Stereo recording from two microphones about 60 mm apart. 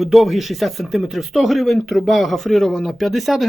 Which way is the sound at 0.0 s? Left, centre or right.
Centre.